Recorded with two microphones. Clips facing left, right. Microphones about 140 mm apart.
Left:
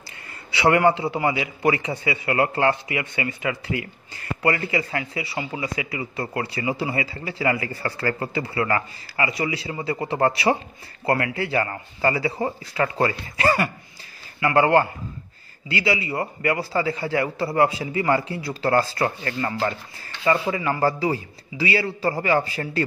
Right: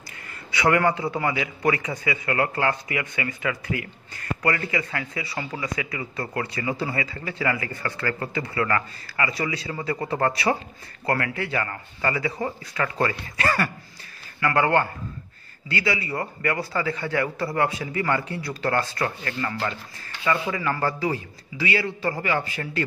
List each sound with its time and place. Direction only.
0.6 s a man's voice: 25° left (ahead or behind)